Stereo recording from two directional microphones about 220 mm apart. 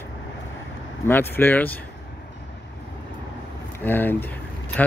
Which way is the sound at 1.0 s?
10° left (ahead or behind).